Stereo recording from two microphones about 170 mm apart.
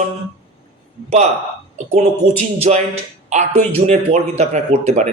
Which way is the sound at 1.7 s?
45° right (ahead or behind).